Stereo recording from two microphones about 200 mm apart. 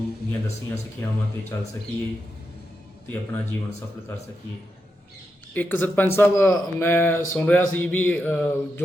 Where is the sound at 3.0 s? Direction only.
10° left (ahead or behind).